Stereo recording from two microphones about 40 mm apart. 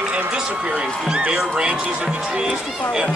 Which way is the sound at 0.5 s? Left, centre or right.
Right.